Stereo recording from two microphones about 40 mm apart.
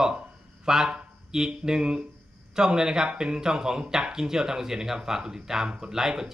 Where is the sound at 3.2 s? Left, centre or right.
Centre.